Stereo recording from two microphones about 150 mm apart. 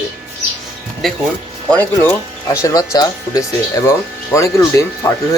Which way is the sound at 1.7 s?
15° left (ahead or behind).